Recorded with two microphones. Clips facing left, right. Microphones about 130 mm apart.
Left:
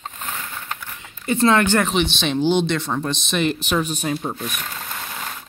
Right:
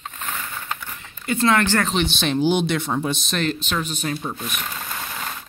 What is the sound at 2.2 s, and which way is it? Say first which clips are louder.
Speech: even; 5° right (ahead or behind).